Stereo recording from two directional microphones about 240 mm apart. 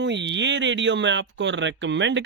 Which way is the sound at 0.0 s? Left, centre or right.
Right.